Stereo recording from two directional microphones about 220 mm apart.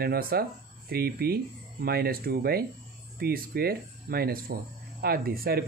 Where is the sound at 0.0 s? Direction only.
45° right (ahead or behind).